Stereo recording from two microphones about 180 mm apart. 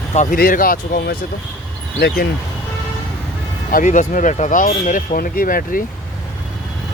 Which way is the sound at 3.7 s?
45° left (ahead or behind).